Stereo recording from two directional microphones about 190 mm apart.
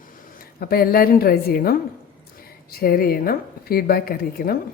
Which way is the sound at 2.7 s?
50° left (ahead or behind).